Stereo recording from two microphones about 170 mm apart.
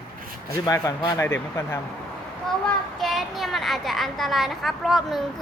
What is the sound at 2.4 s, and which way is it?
A child's voice, centre (ahead or behind).